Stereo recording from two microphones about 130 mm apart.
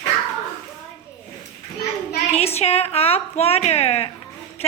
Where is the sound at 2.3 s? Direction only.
50° left (ahead or behind).